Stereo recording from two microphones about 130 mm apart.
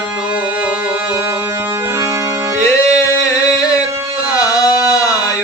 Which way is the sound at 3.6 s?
25° left (ahead or behind).